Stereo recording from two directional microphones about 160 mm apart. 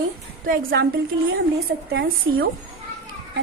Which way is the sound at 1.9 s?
80° right.